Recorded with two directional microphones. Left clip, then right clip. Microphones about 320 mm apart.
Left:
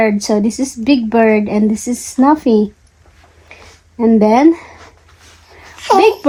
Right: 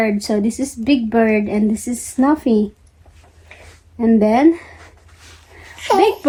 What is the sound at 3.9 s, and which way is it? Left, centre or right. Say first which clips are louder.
Speech: left 4 dB; left.